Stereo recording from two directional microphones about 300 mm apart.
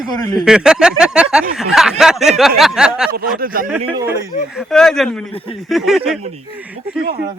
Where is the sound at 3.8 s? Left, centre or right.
Centre.